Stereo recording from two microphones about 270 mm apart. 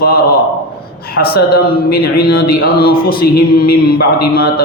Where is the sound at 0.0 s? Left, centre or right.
Left.